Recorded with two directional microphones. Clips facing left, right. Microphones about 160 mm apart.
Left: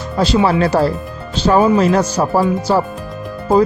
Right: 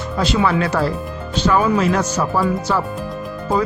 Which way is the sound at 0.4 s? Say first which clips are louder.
Left 4 dB; 35° left (ahead or behind).